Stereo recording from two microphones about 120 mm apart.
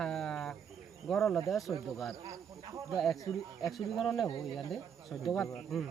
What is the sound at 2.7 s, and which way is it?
Speech, 25° right (ahead or behind).